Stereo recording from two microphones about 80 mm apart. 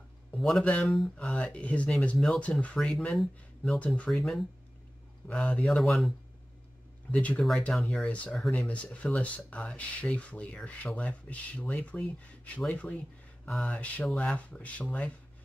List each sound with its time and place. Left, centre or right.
0.4 s speech: centre
1.1 s speech: centre
2.1 s speech: centre
2.6 s speech: centre
3.1 s speech: centre
3.8 s speech: centre
4.1 s speech: centre
5.3 s speech: centre
5.7 s speech: centre
7.1 s speech: centre
7.7 s speech: centre
8.5 s speech: centre